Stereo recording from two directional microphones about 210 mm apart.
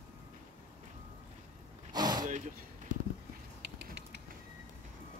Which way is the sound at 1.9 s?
20° right (ahead or behind).